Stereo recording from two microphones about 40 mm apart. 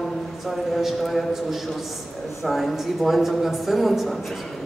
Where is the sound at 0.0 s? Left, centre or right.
Centre.